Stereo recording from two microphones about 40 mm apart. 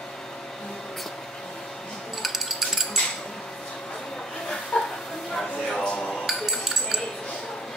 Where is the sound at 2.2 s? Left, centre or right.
Centre.